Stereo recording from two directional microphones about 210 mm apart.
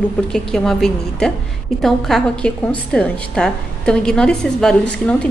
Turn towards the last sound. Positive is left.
turn(degrees=5)  # may be behind; listen again after turning